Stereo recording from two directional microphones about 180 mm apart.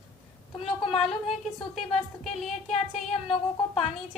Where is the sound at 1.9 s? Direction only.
35° left (ahead or behind).